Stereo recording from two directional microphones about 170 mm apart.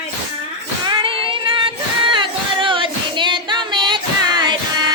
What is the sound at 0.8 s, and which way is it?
Child singing, 30° right (ahead or behind).